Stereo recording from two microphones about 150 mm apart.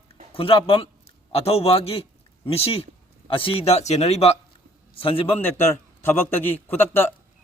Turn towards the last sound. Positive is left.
turn(degrees=15)  # may be behind; listen again after turning